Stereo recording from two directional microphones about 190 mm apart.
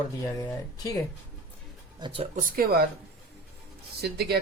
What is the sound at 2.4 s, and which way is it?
Speech, 50° right (ahead or behind).